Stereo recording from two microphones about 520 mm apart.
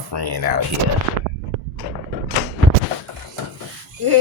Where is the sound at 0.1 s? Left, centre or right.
Right.